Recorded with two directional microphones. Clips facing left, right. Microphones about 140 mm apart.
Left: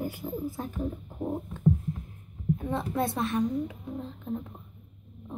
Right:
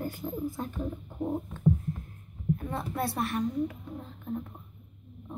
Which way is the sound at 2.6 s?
20° left (ahead or behind).